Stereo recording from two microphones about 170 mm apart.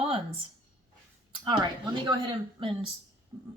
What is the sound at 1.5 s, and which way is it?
Speech, 25° right (ahead or behind).